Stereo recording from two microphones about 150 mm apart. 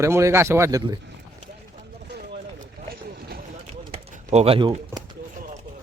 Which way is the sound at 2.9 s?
90° right.